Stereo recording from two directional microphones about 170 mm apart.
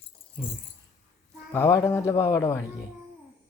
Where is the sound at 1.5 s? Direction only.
15° left (ahead or behind).